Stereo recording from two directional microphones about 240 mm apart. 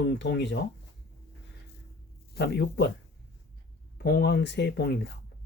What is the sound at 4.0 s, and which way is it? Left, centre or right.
Speech, left.